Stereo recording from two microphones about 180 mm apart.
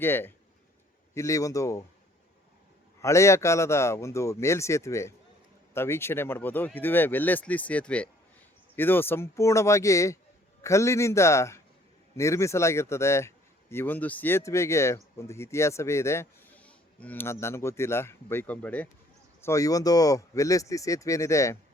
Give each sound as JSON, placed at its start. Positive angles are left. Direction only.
{"t": 0.0, "sound": "speech", "side_deg": 10}
{"t": 3.0, "sound": "speech", "side_deg": 15}